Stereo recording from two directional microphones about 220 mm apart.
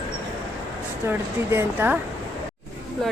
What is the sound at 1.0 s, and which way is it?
Speech, 10° right (ahead or behind).